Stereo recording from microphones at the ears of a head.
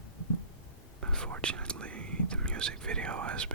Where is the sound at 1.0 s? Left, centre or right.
Right.